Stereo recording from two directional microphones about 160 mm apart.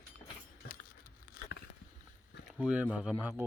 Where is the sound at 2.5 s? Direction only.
5° right (ahead or behind).